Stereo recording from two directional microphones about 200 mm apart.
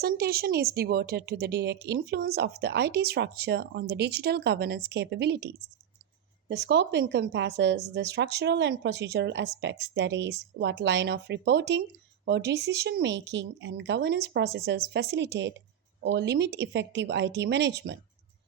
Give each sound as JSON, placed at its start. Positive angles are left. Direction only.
{"t": 0.0, "sound": "a woman's voice", "side_deg": -50}
{"t": 6.5, "sound": "speech", "side_deg": -60}